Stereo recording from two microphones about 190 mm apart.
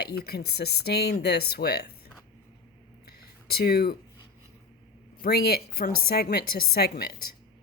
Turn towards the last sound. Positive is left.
turn(degrees=55)  # may be behind; listen again after turning